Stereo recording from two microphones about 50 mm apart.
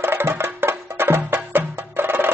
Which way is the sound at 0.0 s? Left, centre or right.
Right.